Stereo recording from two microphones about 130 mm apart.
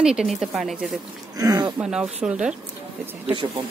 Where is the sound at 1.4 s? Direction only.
25° right (ahead or behind).